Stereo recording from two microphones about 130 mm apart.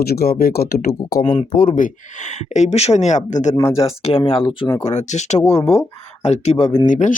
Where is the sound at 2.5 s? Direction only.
60° left (ahead or behind).